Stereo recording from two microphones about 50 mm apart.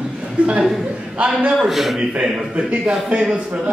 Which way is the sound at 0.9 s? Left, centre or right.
Right.